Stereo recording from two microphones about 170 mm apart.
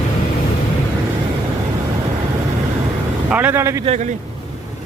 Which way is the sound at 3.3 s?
10° right (ahead or behind).